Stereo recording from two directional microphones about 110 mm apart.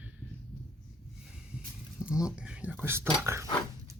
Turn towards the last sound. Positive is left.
turn(degrees=-25)  # may be behind; listen again after turning